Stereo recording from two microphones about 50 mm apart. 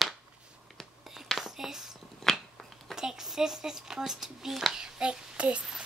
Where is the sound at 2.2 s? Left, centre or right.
Centre.